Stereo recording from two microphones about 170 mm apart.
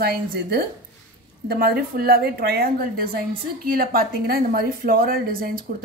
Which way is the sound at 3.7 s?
60° right (ahead or behind).